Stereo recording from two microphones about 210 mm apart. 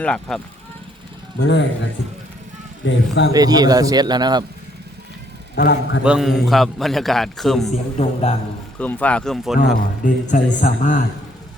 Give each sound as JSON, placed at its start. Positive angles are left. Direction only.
{"t": 0.0, "sound": "a man's voice", "side_deg": 5}
{"t": 1.4, "sound": "speech", "side_deg": 55}
{"t": 2.8, "sound": "speech", "side_deg": 55}
{"t": 3.3, "sound": "a man's voice", "side_deg": -20}
{"t": 5.5, "sound": "a man's voice", "side_deg": 45}
{"t": 6.0, "sound": "a man's voice", "side_deg": -5}
{"t": 7.9, "sound": "a man's voice", "side_deg": 30}
{"t": 8.8, "sound": "a man's voice", "side_deg": 5}
{"t": 9.7, "sound": "speech", "side_deg": 40}